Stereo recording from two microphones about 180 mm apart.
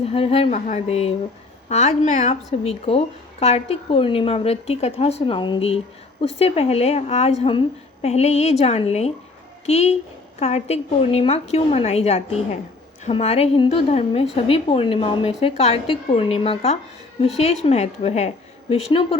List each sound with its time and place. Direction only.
0.0 s a woman's voice: 35° left (ahead or behind)